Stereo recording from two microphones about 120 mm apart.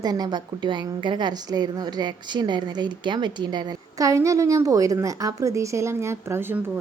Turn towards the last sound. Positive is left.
turn(degrees=-20)  # may be behind; listen again after turning